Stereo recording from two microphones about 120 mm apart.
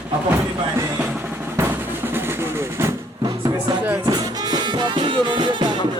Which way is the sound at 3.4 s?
30° right (ahead or behind).